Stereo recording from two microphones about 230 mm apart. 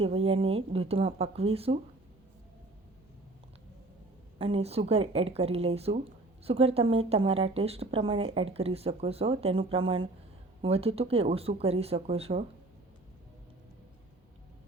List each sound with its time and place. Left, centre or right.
0.0 s a woman's voice: right
4.4 s a woman's voice: right